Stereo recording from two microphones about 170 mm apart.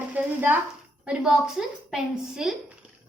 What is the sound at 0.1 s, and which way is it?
Stir, 10° right (ahead or behind).